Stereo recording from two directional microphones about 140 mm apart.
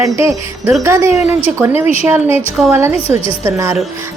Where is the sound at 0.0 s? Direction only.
20° right (ahead or behind).